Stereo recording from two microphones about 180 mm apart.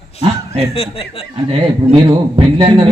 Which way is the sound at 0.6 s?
35° left (ahead or behind).